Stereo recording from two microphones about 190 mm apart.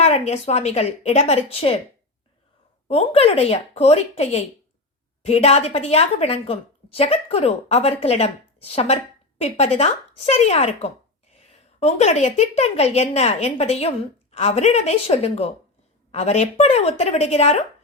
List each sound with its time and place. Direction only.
0.0 s a woman's voice: 35° left (ahead or behind)
2.8 s a woman's voice: 30° left (ahead or behind)